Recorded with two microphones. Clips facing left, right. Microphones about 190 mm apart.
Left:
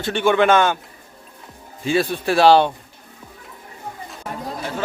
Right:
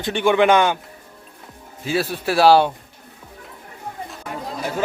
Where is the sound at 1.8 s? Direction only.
5° right (ahead or behind).